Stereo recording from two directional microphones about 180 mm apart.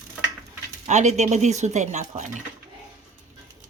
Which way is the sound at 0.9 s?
40° right (ahead or behind).